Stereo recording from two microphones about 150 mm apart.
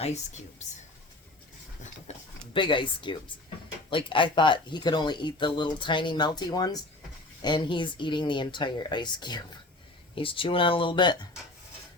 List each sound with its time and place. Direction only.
2.1 s speech: 50° left (ahead or behind)
2.5 s speech: 35° left (ahead or behind)